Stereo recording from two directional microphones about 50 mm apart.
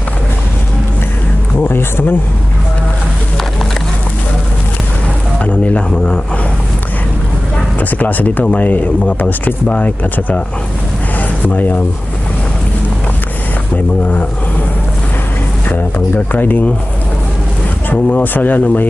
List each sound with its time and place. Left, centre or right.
1.6 s speech: left
5.4 s a sound: left
8.0 s speech: left
11.1 s a sound: left
16.3 s speech: left
17.8 s speech: left